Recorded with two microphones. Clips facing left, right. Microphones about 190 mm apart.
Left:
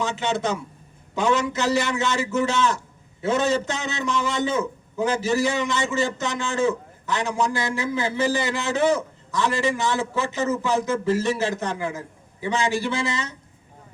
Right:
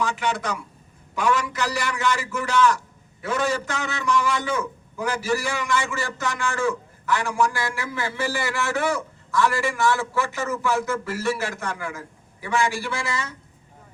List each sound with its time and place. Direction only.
0.0 s a man's voice: 25° left (ahead or behind)